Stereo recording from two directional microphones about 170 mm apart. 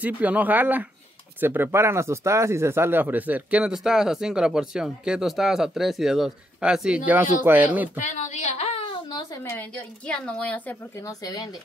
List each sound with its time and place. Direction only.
0.0 s speech: 10° right (ahead or behind)
8.0 s a woman's voice: 45° left (ahead or behind); by 11.1 s 10° left (ahead or behind)
11.1 s speech: 20° left (ahead or behind)